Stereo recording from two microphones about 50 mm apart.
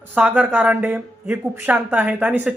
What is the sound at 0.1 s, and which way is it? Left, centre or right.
Speech, right.